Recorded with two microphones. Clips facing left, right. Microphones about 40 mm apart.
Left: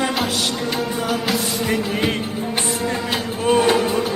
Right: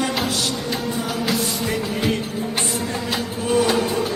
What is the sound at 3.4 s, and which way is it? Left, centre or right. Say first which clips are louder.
Music: left 3 dB; left.